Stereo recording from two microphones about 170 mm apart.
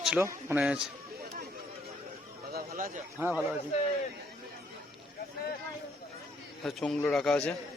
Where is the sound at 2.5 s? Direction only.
60° right (ahead or behind).